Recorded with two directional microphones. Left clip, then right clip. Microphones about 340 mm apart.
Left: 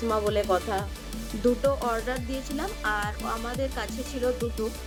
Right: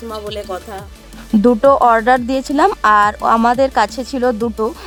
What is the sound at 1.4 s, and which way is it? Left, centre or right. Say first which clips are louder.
Speech: right 15 dB; right.